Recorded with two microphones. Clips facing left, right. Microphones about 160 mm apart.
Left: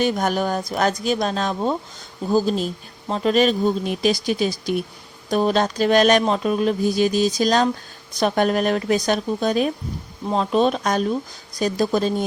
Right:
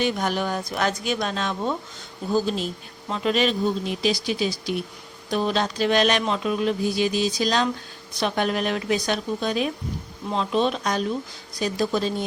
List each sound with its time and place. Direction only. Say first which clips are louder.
0.0 s speech: left 4 dB; 45° left (ahead or behind)